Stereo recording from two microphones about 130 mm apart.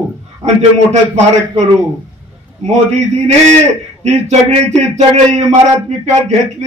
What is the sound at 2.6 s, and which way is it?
Speech, 55° right (ahead or behind).